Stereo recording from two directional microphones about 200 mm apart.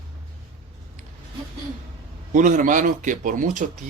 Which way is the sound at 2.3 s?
40° right (ahead or behind).